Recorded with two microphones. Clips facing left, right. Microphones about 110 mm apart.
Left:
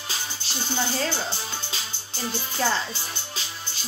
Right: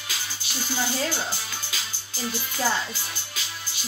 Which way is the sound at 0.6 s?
30° left (ahead or behind).